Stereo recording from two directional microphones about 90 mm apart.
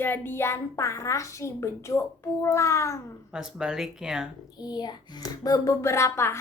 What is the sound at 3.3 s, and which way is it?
Speech, 5° right (ahead or behind).